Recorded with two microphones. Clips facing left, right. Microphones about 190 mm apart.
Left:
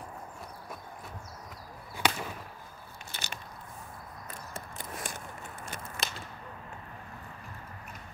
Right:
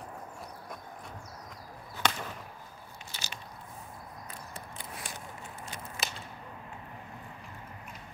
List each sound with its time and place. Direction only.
2.0 s chop: 10° left (ahead or behind)
3.1 s biting: 55° left (ahead or behind)
4.6 s a sound: 45° left (ahead or behind)
6.0 s whip: 5° right (ahead or behind)